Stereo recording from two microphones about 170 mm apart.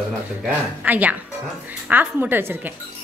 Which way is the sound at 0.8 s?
10° right (ahead or behind).